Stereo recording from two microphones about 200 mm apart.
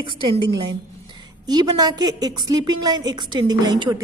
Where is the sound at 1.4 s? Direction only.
20° right (ahead or behind).